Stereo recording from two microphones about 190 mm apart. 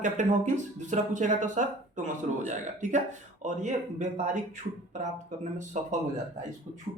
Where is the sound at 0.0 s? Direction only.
40° right (ahead or behind).